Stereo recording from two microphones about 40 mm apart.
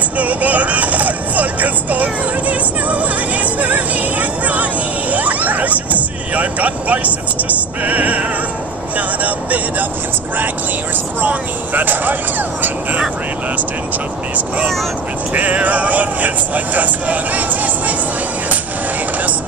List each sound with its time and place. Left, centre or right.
0.2 s speech: right
3.5 s music: right
5.1 s speech: right
11.1 s speech: right
15.3 s speech: right